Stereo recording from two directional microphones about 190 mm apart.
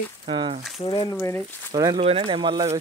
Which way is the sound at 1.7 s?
20° right (ahead or behind).